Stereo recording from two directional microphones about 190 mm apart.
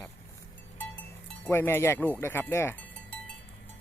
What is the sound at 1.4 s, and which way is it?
Speech, 10° left (ahead or behind).